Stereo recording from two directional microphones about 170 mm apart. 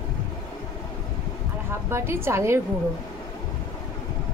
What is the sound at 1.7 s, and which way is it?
Speech, 15° right (ahead or behind).